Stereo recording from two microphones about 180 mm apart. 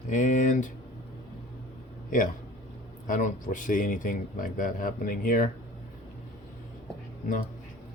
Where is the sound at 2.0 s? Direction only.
45° left (ahead or behind).